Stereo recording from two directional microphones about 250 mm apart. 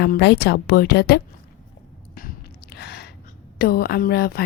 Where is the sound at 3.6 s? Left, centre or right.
Left.